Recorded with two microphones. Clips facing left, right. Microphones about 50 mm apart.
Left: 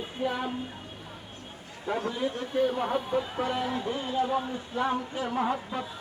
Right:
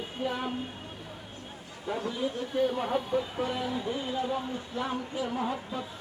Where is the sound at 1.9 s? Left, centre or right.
Left.